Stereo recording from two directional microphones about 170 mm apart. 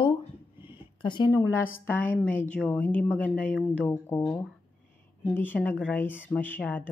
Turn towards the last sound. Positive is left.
turn(degrees=10)  # may be behind; listen again after turning